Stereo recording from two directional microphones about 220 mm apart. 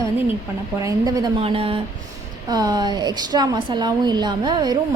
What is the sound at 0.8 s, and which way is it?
A woman's voice, 15° right (ahead or behind).